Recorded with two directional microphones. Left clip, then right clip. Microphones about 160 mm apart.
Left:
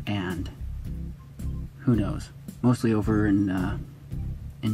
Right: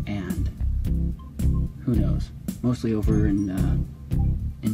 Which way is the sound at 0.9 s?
Centre (ahead or behind).